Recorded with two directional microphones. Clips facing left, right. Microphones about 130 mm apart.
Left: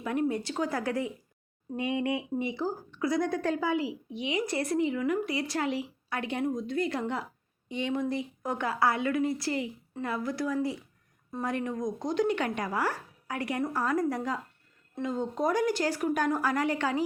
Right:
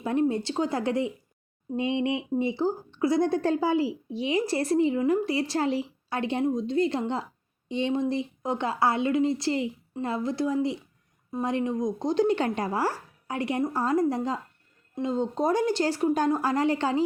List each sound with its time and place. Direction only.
0.0 s a woman's voice: 30° right (ahead or behind)